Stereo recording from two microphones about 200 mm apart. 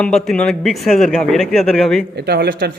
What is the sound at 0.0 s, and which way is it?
A man's voice, 5° left (ahead or behind).